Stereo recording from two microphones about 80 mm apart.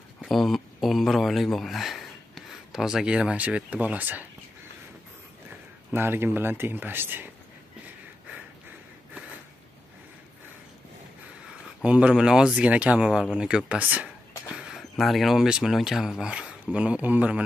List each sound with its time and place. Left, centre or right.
0.2 s speech: centre; by 4.3 s right
5.9 s speech: right
11.6 s speech: centre
14.5 s a sound: centre
15.0 s speech: centre